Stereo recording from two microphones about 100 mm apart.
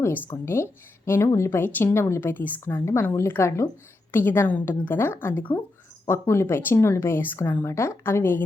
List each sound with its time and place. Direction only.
0.4 s speech: 25° left (ahead or behind)